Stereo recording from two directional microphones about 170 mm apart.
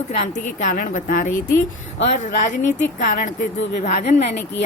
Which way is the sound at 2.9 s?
50° left (ahead or behind).